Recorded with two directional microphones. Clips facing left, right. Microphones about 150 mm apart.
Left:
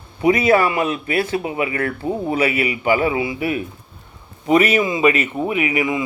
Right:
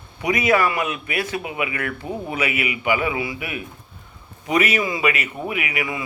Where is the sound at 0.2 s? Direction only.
30° left (ahead or behind).